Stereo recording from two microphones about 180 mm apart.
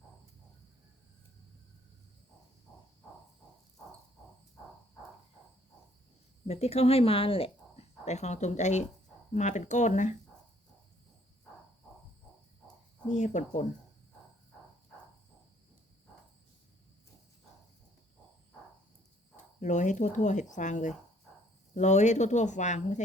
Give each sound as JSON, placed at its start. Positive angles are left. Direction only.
{"t": 6.5, "sound": "speech", "side_deg": 35}
{"t": 13.1, "sound": "speech", "side_deg": 40}
{"t": 19.5, "sound": "speech", "side_deg": 45}